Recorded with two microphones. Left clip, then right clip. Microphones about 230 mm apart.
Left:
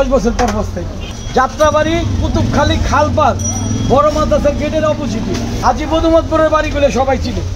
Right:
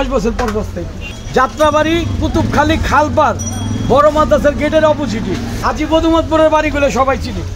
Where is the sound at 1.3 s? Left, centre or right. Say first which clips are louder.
Even; right.